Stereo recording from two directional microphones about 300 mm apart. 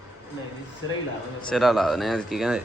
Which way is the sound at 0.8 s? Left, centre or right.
Left.